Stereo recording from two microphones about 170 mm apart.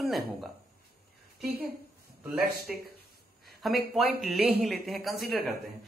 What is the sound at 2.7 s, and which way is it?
Speech, centre (ahead or behind).